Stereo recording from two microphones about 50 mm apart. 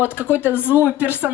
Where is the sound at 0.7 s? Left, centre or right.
Right.